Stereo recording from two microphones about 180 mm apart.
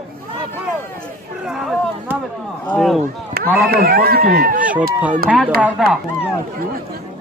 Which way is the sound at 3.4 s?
55° right (ahead or behind).